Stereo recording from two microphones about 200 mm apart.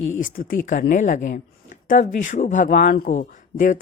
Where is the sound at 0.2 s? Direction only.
45° left (ahead or behind).